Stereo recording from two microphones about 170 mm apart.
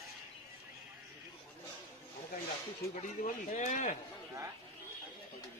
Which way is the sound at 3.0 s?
45° left (ahead or behind).